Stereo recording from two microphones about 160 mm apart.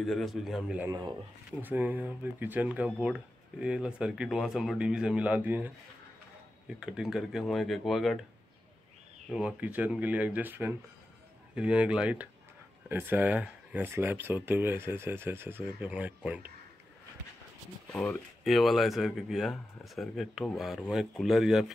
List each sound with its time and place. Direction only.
0.0 s speech: centre (ahead or behind)
0.8 s speech: 25° right (ahead or behind)
1.6 s speech: 10° right (ahead or behind)
6.8 s speech: 5° right (ahead or behind)
9.3 s speech: 5° right (ahead or behind)
17.9 s speech: 5° left (ahead or behind)